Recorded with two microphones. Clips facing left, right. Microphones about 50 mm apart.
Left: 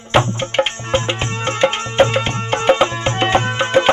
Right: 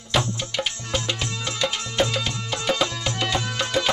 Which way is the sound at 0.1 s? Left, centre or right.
Left.